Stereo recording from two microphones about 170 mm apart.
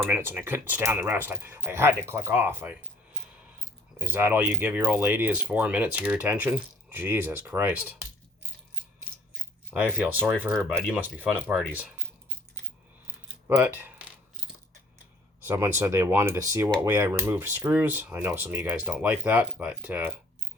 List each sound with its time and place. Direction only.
0.1 s speech: 10° right (ahead or behind)
3.9 s speech: 10° right (ahead or behind)
9.7 s speech: 10° right (ahead or behind)
10.6 s speech: 5° left (ahead or behind)
10.9 s speech: 10° right (ahead or behind)
13.5 s coin: 10° right (ahead or behind)
15.4 s speech: 15° right (ahead or behind)